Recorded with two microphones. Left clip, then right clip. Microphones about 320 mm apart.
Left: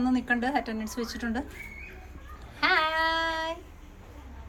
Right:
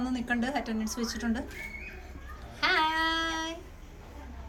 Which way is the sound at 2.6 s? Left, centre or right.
Centre.